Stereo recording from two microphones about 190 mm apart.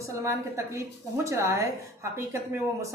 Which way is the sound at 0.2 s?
15° right (ahead or behind).